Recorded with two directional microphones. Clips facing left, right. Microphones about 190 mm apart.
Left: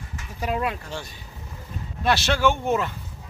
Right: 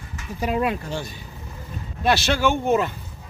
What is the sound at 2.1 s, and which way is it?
Speech, 10° right (ahead or behind).